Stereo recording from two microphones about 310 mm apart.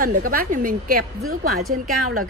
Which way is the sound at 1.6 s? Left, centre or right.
Right.